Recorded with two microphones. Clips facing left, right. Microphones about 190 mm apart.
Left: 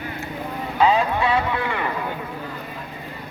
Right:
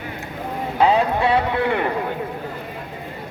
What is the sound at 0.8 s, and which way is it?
A man's voice, 60° right (ahead or behind).